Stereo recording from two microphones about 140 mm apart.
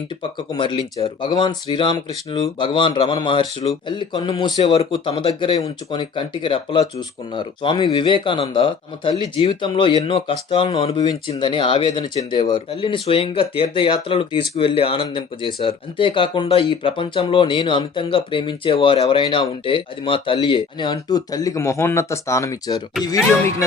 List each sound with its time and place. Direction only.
0.2 s speech: 35° left (ahead or behind)
4.6 s speech: 45° left (ahead or behind); by 23.6 s 25° left (ahead or behind)